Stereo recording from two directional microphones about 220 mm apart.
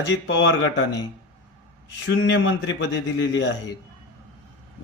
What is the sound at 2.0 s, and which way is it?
A man's voice, 55° left (ahead or behind).